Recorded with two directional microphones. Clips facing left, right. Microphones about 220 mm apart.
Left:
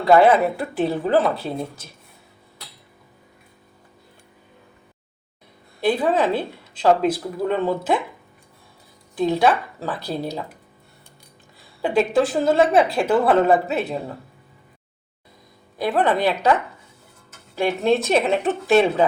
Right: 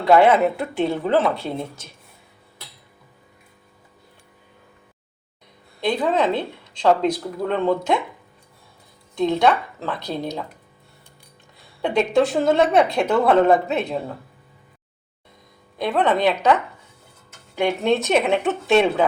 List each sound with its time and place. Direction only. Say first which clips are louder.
0.0 s a woman's voice: even; centre (ahead or behind)
5.8 s speech: left 1 dB; 5° left (ahead or behind)
9.1 s a woman's voice: even; 5° left (ahead or behind)
11.8 s a woman's voice: even; 5° left (ahead or behind)
15.8 s a woman's voice: even; 5° left (ahead or behind)
17.7 s a woman's voice: left 1 dB; centre (ahead or behind)